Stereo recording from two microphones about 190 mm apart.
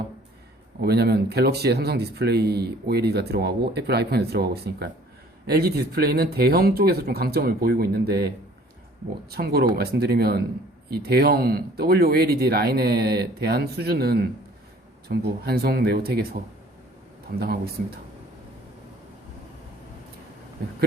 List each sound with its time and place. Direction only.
0.8 s speech: 60° right (ahead or behind)
9.3 s speech: 55° right (ahead or behind)
17.4 s speech: 55° right (ahead or behind)